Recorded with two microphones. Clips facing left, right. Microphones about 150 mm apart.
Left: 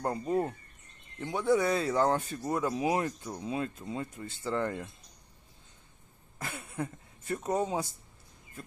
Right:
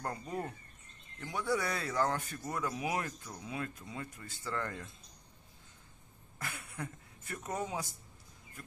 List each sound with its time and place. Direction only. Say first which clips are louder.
0.0 s speech: left 9 dB; 25° left (ahead or behind)
6.3 s speech: left 6 dB; 25° left (ahead or behind)